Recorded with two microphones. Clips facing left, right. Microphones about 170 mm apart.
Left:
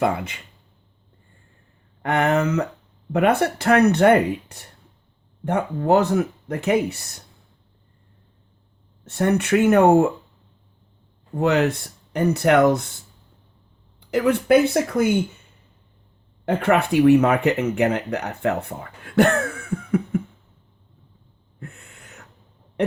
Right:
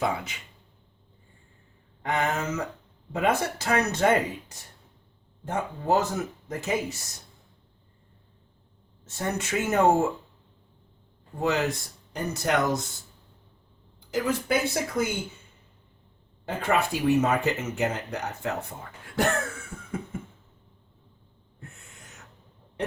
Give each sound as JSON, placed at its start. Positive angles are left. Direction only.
{"t": 0.0, "sound": "speech", "side_deg": 60}
{"t": 2.0, "sound": "speech", "side_deg": 60}
{"t": 9.0, "sound": "speech", "side_deg": 65}
{"t": 11.3, "sound": "speech", "side_deg": 65}
{"t": 14.0, "sound": "speech", "side_deg": 65}
{"t": 16.5, "sound": "speech", "side_deg": 65}
{"t": 19.7, "sound": "cough", "side_deg": 65}
{"t": 21.6, "sound": "a sound", "side_deg": 65}